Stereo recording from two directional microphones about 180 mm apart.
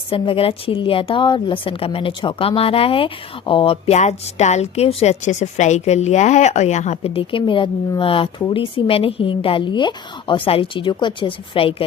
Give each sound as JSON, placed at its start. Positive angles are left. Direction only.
{"t": 0.1, "sound": "a woman's voice", "side_deg": 30}